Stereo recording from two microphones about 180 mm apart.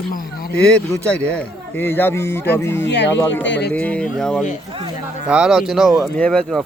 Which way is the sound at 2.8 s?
75° left (ahead or behind).